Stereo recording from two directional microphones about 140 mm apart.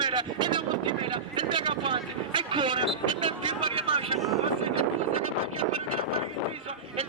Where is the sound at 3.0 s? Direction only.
35° right (ahead or behind).